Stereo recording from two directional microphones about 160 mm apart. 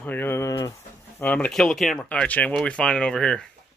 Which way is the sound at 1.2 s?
10° left (ahead or behind).